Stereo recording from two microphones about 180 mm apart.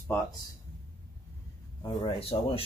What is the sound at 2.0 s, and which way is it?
Speech, 30° left (ahead or behind).